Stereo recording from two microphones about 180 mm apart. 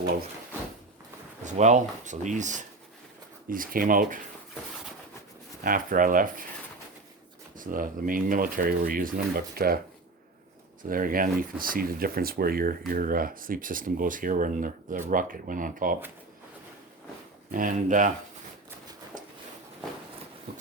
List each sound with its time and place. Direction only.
1.5 s speech: 40° right (ahead or behind)
5.6 s speech: 50° right (ahead or behind)
7.5 s speech: 50° right (ahead or behind)
10.8 s speech: 50° right (ahead or behind)
17.5 s speech: 50° right (ahead or behind)